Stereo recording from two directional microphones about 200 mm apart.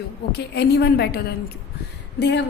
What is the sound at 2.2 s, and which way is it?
Speech, 60° left (ahead or behind).